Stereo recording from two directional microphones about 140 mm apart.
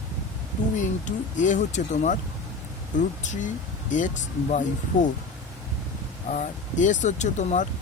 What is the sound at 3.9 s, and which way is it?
Speech, 60° left (ahead or behind).